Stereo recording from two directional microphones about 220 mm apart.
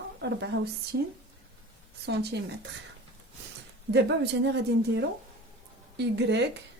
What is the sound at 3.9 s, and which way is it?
Speech, 50° right (ahead or behind).